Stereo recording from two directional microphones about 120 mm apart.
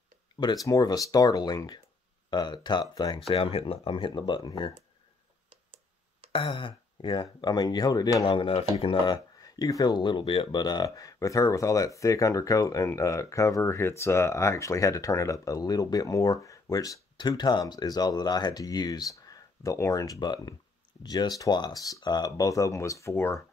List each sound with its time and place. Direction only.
0.3 s a sound: 40° left (ahead or behind)
0.7 s speech: 30° left (ahead or behind)
3.3 s speech: 50° left (ahead or behind); by 4.7 s 35° left (ahead or behind)
6.3 s speech: 45° left (ahead or behind)
8.3 s speech: 50° left (ahead or behind); by 23.4 s 20° left (ahead or behind)